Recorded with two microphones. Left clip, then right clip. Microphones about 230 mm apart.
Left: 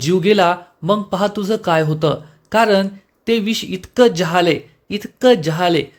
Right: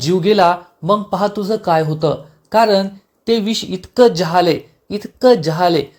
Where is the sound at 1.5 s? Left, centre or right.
Centre.